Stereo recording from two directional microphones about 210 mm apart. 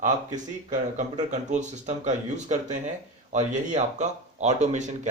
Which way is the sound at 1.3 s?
35° right (ahead or behind).